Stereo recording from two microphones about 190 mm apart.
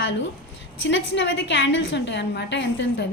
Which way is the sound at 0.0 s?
75° left (ahead or behind).